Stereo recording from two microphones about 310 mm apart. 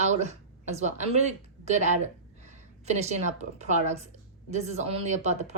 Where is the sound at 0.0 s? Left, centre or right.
Right.